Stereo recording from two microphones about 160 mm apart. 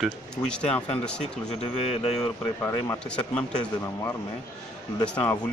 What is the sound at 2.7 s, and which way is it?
Speech, 15° left (ahead or behind).